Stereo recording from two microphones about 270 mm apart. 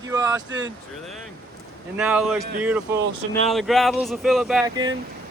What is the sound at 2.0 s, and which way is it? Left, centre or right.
Speech, centre.